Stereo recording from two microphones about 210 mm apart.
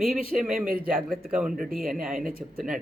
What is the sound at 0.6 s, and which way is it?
Speech, 45° right (ahead or behind).